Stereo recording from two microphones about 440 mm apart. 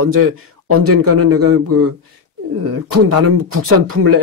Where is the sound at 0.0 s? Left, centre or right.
Right.